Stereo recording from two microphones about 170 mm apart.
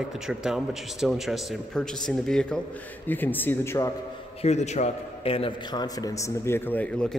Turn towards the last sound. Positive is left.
turn(degrees=5)  # may be behind; listen again after turning